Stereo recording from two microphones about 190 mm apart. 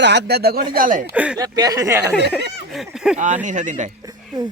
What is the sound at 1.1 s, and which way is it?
Speech, 5° right (ahead or behind).